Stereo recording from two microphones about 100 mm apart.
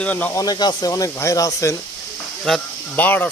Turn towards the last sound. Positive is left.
turn(degrees=15)  # may be behind; listen again after turning